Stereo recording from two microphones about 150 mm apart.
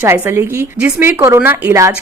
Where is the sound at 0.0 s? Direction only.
15° right (ahead or behind).